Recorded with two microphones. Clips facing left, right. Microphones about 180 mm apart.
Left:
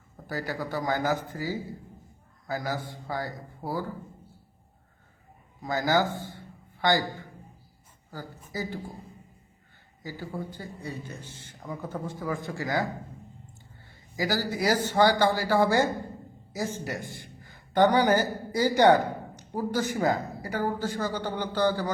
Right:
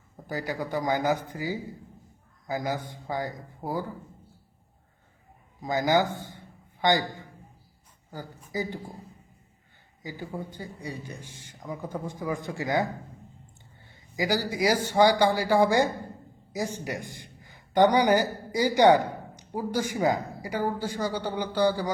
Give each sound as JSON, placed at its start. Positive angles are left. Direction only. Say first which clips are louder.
{"t": 0.3, "sound": "speech", "louder": "right 1 dB", "side_deg": -15}
{"t": 5.6, "sound": "a man's voice", "louder": "right 1 dB", "side_deg": -20}
{"t": 10.0, "sound": "speech", "louder": "even", "side_deg": -15}
{"t": 14.2, "sound": "speech", "louder": "right 2 dB", "side_deg": -15}